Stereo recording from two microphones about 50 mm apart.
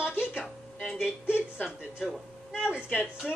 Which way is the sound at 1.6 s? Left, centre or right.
Centre.